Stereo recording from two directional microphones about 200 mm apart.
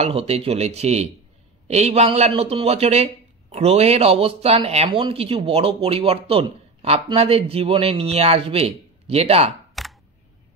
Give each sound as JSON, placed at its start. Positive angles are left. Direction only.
{"t": 0.0, "sound": "speech", "side_deg": -30}
{"t": 9.8, "sound": "computer keyboard", "side_deg": 0}